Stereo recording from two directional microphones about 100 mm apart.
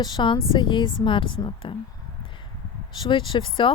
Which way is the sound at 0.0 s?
50° left (ahead or behind).